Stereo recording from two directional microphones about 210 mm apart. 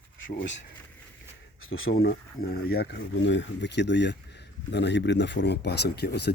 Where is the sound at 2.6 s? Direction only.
50° left (ahead or behind).